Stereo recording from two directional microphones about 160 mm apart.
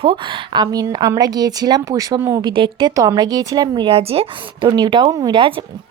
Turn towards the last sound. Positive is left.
turn(degrees=-30)  # may be behind; listen again after turning